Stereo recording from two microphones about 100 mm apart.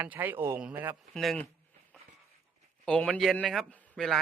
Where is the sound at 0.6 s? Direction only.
10° right (ahead or behind).